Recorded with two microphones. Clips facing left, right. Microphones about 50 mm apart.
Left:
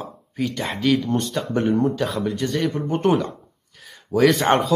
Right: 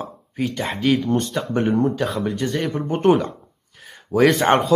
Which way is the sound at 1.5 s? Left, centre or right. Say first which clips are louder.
Right 1 dB; centre.